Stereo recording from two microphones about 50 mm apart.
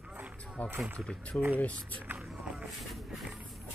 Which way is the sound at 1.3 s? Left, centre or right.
Left.